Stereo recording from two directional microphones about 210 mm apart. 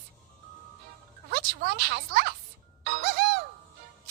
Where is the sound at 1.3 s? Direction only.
50° right (ahead or behind).